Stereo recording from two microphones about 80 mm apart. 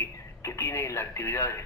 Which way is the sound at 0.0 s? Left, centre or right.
Left.